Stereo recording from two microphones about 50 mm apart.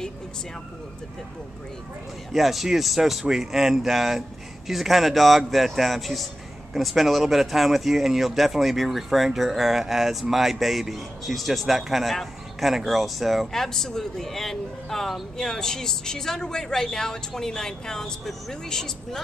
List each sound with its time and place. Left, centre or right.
2.3 s a man's voice: centre